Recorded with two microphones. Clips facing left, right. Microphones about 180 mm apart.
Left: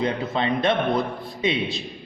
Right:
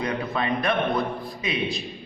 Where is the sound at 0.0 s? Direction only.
25° left (ahead or behind).